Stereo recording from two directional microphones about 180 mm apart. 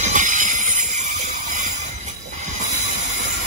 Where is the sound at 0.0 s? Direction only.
45° right (ahead or behind).